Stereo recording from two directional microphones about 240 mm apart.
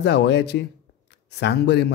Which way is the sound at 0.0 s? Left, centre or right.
Left.